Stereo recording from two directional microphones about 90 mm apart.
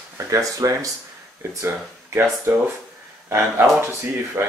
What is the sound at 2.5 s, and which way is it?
Speech, 35° right (ahead or behind).